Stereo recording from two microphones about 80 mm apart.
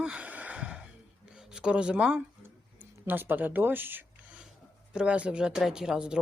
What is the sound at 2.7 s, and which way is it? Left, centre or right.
Speech, right.